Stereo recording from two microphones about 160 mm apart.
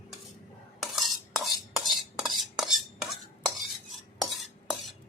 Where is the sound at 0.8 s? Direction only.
Centre (ahead or behind).